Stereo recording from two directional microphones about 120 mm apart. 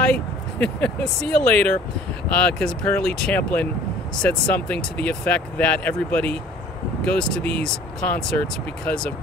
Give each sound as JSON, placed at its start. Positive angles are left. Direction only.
{"t": 0.0, "sound": "speech", "side_deg": 10}